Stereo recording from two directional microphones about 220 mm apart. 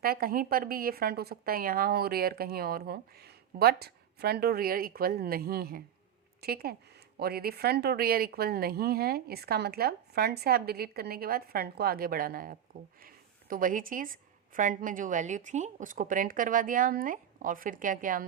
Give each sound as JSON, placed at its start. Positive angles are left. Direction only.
{"t": 0.0, "sound": "a woman's voice", "side_deg": -40}